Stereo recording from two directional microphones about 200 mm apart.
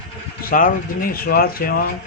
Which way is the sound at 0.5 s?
45° left (ahead or behind).